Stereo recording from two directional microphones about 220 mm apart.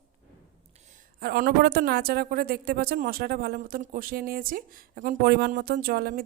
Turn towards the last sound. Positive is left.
turn(degrees=-45)  # may be behind; listen again after turning